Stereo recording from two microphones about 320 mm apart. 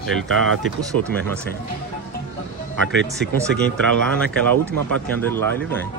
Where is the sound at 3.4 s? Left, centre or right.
Centre.